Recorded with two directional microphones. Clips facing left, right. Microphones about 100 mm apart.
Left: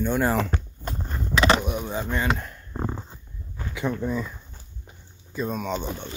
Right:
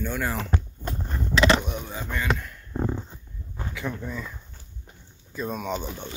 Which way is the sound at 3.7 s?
20° left (ahead or behind).